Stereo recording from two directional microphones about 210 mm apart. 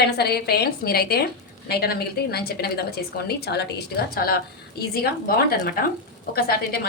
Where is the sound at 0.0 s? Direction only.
50° left (ahead or behind).